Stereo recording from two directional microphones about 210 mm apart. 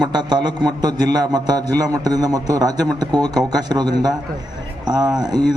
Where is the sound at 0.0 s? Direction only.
20° right (ahead or behind).